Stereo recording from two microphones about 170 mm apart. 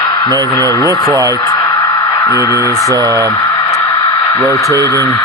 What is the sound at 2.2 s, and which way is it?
Speech, 20° left (ahead or behind).